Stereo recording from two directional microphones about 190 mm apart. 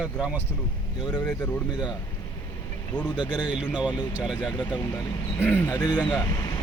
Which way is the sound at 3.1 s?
20° left (ahead or behind).